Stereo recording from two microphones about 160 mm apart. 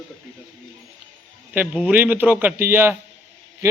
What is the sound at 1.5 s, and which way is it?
Mantra, 10° right (ahead or behind).